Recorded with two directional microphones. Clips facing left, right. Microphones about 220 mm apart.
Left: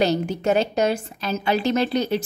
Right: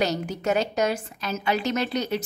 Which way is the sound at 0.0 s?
30° left (ahead or behind).